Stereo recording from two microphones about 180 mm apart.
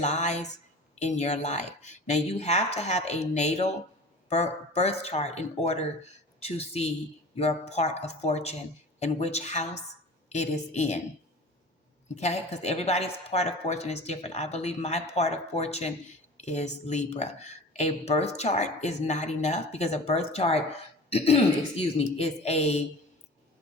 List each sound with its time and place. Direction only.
0.0 s speech: 40° left (ahead or behind)
12.1 s speech: 40° left (ahead or behind)